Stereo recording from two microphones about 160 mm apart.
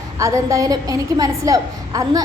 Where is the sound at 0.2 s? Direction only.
20° right (ahead or behind).